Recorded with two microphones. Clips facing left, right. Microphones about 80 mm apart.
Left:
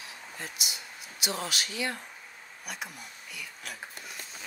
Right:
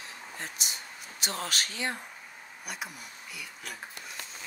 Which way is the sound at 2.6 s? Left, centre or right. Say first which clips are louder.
Even; centre.